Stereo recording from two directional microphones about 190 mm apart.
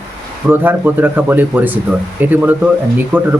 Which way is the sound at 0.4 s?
10° right (ahead or behind).